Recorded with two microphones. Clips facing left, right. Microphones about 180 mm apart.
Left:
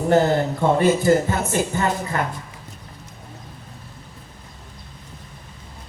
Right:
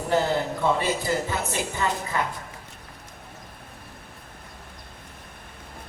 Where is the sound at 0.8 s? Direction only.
50° left (ahead or behind).